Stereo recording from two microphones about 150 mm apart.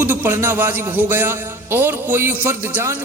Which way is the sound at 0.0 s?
15° right (ahead or behind).